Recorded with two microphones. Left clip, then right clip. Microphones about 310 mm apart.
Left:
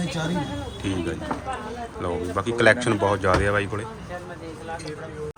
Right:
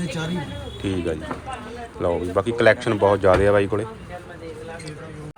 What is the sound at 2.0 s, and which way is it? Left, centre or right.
Speech, centre.